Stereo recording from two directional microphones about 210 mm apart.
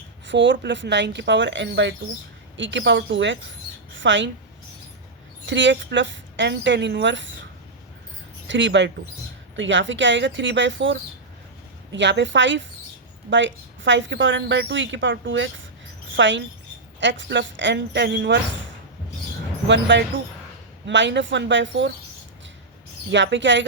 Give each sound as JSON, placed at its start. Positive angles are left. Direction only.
{"t": 0.3, "sound": "a woman's voice", "side_deg": -60}
{"t": 5.5, "sound": "a woman's voice", "side_deg": -60}
{"t": 8.4, "sound": "a woman's voice", "side_deg": -60}
{"t": 19.6, "sound": "a woman's voice", "side_deg": -55}
{"t": 23.1, "sound": "a woman's voice", "side_deg": -60}